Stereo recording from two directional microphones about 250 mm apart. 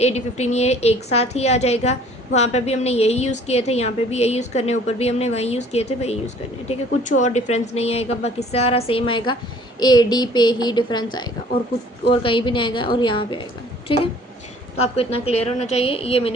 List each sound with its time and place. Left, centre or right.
0.0 s a woman's voice: left